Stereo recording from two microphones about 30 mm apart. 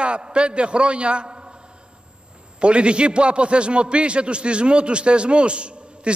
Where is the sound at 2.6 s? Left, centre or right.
Right.